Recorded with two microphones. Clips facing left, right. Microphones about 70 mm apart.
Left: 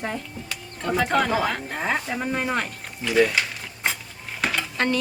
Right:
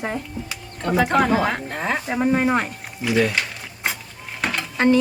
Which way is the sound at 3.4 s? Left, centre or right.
Centre.